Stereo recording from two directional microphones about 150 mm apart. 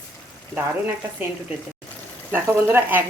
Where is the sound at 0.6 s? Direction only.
15° right (ahead or behind).